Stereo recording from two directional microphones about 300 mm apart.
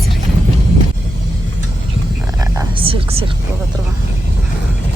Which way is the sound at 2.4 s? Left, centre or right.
Centre.